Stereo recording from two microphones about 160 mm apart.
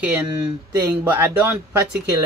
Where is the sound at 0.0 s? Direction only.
5° right (ahead or behind).